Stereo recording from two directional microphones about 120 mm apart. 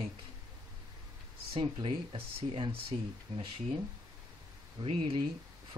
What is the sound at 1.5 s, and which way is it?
Speech, 45° right (ahead or behind).